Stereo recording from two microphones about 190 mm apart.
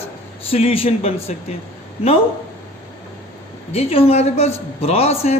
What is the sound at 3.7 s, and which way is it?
A man's voice, 30° left (ahead or behind).